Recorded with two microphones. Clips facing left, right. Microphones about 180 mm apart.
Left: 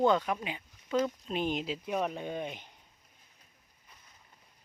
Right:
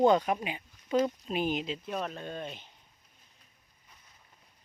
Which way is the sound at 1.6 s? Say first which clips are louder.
Left 2 dB; 10° left (ahead or behind).